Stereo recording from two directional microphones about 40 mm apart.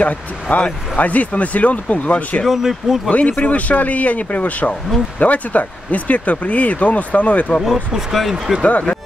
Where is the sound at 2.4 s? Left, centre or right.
Centre.